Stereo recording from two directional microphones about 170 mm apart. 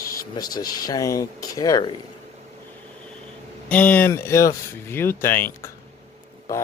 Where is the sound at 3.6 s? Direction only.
10° left (ahead or behind).